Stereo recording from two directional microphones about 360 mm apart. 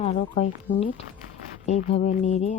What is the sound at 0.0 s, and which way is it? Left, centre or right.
Speech, centre.